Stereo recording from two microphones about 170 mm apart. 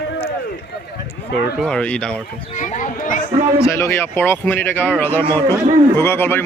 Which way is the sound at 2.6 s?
50° left (ahead or behind).